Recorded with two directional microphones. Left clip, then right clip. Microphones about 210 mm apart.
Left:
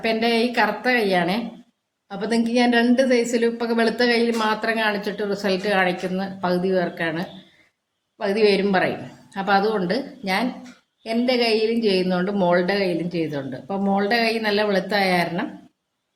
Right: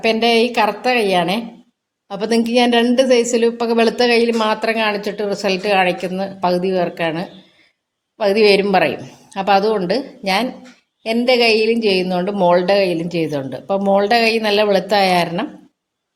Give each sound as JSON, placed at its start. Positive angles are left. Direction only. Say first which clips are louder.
{"t": 0.0, "sound": "a woman's voice", "louder": "right 6 dB", "side_deg": -25}